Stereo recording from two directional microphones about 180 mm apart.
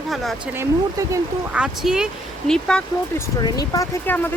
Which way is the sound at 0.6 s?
15° right (ahead or behind).